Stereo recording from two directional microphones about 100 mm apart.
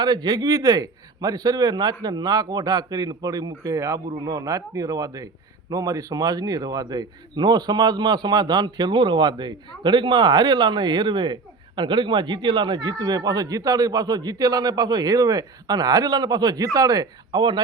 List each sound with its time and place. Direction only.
0.0 s a man's voice: 45° right (ahead or behind)